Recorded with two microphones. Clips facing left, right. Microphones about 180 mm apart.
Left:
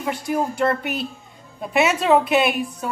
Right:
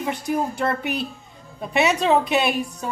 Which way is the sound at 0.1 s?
Centre (ahead or behind).